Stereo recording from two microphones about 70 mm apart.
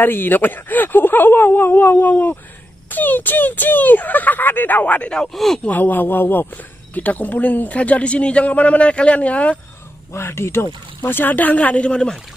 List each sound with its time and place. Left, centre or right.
0.0 s speech: left
5.3 s speech: centre
5.7 s speech: left
10.1 s speech: left; by 12.2 s centre